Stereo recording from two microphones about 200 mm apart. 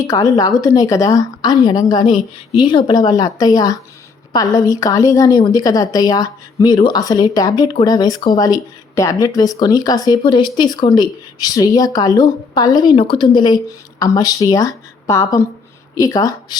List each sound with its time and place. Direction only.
0.1 s a woman's voice: 20° left (ahead or behind)